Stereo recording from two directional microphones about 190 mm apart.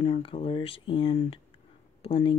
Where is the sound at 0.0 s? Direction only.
30° left (ahead or behind).